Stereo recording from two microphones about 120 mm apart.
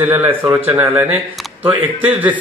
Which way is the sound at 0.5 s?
15° right (ahead or behind).